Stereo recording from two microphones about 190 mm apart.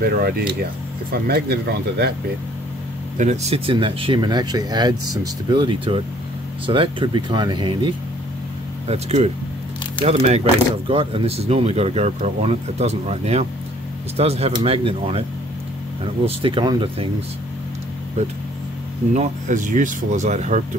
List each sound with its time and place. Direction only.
0.0 s speech: 55° right (ahead or behind)
3.2 s speech: 35° right (ahead or behind)
19.1 s speech: 40° right (ahead or behind)